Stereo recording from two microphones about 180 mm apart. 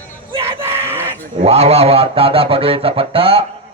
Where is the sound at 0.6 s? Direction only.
15° right (ahead or behind).